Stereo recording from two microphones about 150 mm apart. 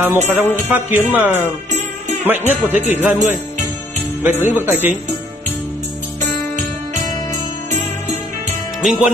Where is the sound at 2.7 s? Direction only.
50° left (ahead or behind).